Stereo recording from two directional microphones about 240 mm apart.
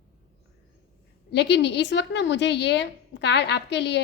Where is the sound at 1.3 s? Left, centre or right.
Left.